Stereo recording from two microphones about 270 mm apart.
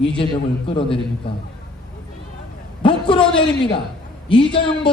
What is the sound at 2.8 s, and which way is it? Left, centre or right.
A man's voice, centre.